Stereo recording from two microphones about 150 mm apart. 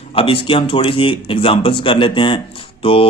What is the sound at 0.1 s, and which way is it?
Speech, 35° left (ahead or behind).